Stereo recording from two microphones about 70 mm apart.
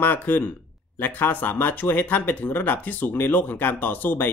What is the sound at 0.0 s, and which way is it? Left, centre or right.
Speech, left.